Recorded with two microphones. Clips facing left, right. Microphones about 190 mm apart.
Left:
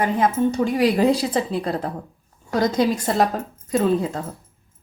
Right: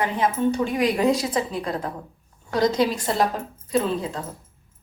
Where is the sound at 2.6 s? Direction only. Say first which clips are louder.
Left 1 dB; 50° left (ahead or behind).